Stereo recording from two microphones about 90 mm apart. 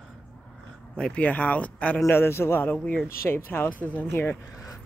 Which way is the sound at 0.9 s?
10° left (ahead or behind).